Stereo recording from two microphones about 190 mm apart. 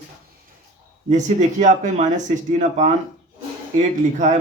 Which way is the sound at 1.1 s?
40° right (ahead or behind).